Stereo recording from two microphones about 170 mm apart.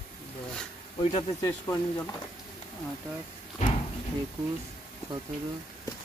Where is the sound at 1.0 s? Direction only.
35° left (ahead or behind).